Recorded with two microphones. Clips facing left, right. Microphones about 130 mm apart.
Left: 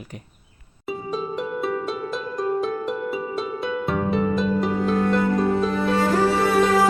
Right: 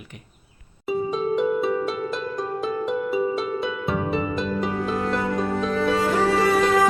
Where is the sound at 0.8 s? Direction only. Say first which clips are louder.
Right 4 dB; centre (ahead or behind).